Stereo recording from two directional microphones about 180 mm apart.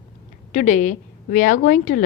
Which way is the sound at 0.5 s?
40° left (ahead or behind).